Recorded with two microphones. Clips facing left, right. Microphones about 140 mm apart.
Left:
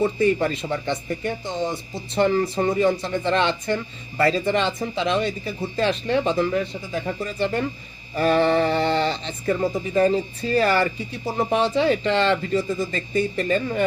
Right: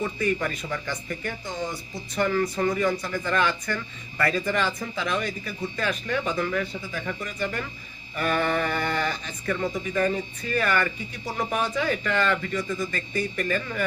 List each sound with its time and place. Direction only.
0.0 s speech: 30° left (ahead or behind)